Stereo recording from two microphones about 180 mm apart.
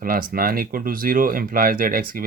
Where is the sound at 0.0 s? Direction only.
50° right (ahead or behind).